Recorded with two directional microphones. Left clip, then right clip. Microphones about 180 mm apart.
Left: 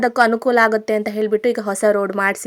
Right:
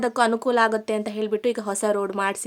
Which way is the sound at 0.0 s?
25° left (ahead or behind).